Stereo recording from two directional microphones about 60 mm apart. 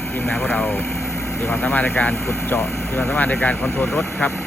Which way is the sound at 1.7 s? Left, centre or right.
Left.